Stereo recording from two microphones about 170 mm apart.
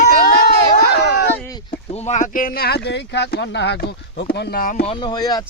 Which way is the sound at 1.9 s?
45° left (ahead or behind).